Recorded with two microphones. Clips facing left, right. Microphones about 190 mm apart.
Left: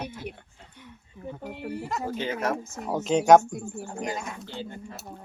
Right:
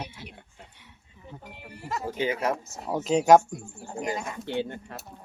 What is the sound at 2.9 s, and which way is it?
Speech, centre (ahead or behind).